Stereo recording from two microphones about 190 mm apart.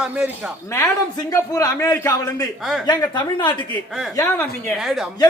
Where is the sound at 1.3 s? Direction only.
15° left (ahead or behind).